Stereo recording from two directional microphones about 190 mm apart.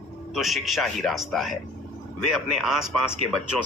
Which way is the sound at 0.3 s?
Centre (ahead or behind).